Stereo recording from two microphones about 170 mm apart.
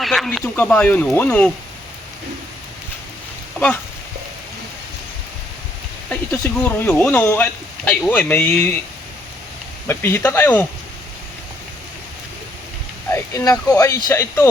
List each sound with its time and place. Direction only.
0.0 s speech: centre (ahead or behind)
3.6 s speech: 10° left (ahead or behind)
6.1 s speech: 10° left (ahead or behind)
9.8 s speech: 15° left (ahead or behind)
13.1 s speech: 15° left (ahead or behind)